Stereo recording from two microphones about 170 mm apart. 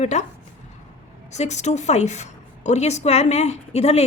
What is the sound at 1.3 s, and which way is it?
A woman's voice, 40° left (ahead or behind).